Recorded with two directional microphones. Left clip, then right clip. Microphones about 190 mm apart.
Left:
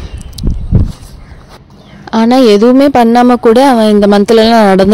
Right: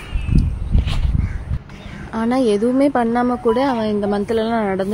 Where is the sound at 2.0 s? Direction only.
45° left (ahead or behind).